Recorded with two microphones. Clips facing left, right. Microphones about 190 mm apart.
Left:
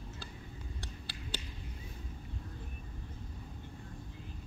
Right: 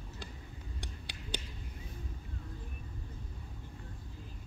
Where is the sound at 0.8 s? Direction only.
15° right (ahead or behind).